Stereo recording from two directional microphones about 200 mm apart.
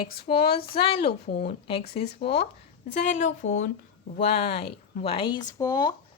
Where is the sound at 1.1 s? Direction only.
55° left (ahead or behind).